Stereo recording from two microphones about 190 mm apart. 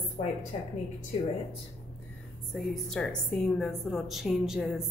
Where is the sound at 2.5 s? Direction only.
Centre (ahead or behind).